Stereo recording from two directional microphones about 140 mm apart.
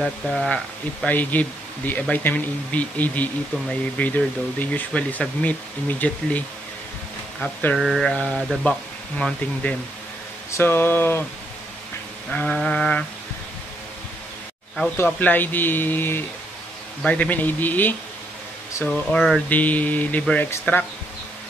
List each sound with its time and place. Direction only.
0.0 s mantra: 5° left (ahead or behind)
1.0 s speech: 10° left (ahead or behind)
7.3 s mantra: 10° left (ahead or behind)
8.6 s speech: 10° left (ahead or behind)
12.3 s speech: 10° left (ahead or behind)
15.0 s speech: 10° left (ahead or behind)
18.9 s mantra: 5° left (ahead or behind)
19.5 s speech: 10° left (ahead or behind)